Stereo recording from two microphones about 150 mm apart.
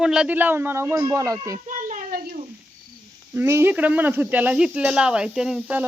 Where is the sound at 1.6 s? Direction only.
60° right (ahead or behind).